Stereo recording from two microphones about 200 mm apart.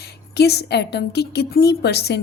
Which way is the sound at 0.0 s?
55° left (ahead or behind).